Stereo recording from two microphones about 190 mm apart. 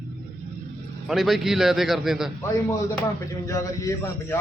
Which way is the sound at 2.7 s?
15° left (ahead or behind).